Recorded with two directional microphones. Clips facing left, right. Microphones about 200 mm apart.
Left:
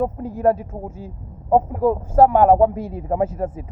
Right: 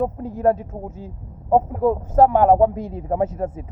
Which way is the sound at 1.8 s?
20° right (ahead or behind).